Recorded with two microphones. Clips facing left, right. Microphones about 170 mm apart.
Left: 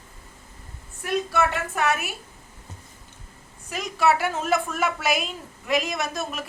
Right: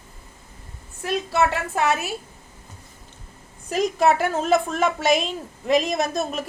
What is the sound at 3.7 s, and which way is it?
A woman's voice, 35° right (ahead or behind).